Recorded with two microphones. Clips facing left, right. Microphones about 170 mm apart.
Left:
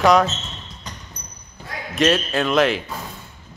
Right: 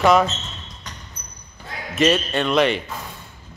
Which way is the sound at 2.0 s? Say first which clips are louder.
Even; centre (ahead or behind).